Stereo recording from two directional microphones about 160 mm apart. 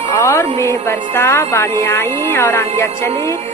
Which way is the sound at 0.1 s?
15° left (ahead or behind).